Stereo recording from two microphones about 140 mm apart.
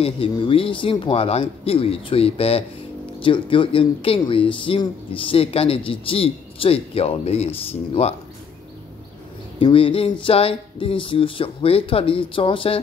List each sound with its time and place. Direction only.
0.0 s speech: 40° left (ahead or behind)
9.6 s speech: 40° left (ahead or behind)